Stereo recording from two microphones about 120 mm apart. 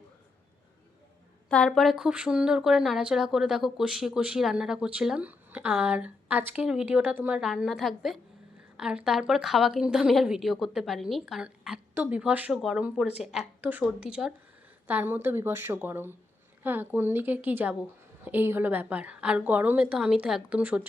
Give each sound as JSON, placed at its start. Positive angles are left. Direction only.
{"t": 1.5, "sound": "a woman's voice", "side_deg": 5}